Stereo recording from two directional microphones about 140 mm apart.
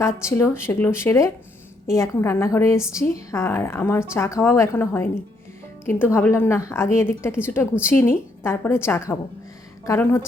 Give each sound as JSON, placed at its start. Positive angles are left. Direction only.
{"t": 0.0, "sound": "a woman's voice", "side_deg": 20}